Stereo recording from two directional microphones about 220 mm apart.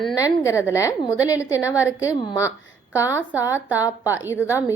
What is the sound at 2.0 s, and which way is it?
A woman's voice, 15° left (ahead or behind).